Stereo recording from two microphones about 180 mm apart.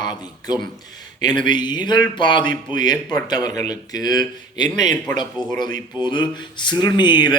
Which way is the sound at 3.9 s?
20° left (ahead or behind).